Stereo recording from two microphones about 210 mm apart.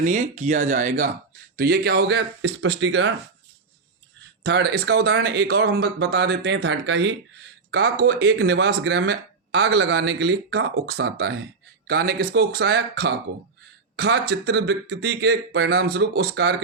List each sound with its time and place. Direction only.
0.0 s speech: 35° right (ahead or behind); by 3.1 s 60° right (ahead or behind)
4.4 s speech: 50° right (ahead or behind)